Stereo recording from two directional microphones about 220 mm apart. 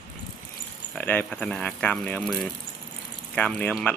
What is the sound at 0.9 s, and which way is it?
Speech, 10° left (ahead or behind).